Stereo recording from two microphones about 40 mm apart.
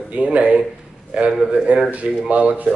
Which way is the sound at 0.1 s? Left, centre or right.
Right.